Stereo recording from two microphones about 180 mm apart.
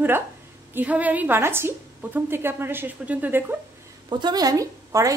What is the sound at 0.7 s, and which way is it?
A woman's voice, 10° right (ahead or behind).